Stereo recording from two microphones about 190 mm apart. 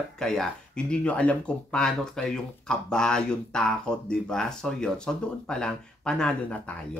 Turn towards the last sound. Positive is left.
turn(degrees=5)  # may be behind; listen again after turning